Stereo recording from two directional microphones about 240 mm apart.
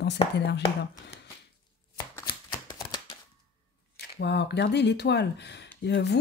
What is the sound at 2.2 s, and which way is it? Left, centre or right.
Shuffling cards, centre.